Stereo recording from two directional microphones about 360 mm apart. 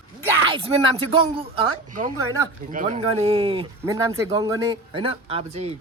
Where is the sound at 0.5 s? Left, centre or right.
Centre.